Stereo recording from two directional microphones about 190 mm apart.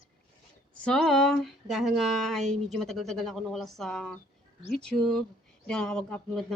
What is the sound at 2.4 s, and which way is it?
Speech, 35° right (ahead or behind).